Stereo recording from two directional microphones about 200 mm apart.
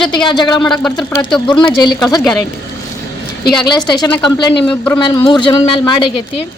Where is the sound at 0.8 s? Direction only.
5° left (ahead or behind).